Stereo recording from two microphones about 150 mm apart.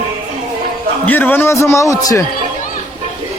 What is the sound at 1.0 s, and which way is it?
A man's voice, 15° left (ahead or behind).